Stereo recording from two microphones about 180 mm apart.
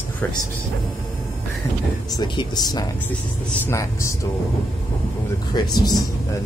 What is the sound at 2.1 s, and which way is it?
Speech, 25° left (ahead or behind).